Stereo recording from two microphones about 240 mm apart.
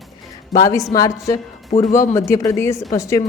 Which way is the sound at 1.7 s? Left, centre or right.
Left.